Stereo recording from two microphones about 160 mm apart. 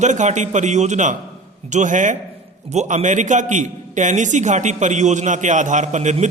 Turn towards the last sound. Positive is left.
turn(degrees=-45)  # may be behind; listen again after turning